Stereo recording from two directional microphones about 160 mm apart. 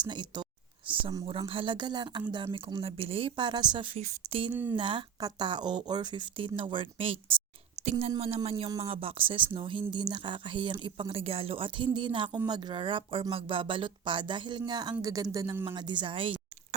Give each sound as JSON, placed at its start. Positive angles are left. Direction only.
{"t": 0.0, "sound": "speech", "side_deg": -30}
{"t": 4.5, "sound": "speech", "side_deg": -10}
{"t": 4.8, "sound": "speech", "side_deg": -30}